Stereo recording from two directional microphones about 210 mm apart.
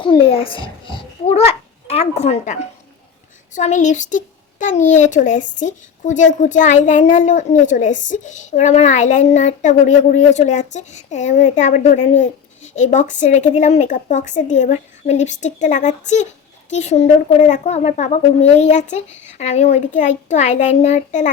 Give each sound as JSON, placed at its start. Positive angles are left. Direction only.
{"t": 0.0, "sound": "a child's voice", "side_deg": 25}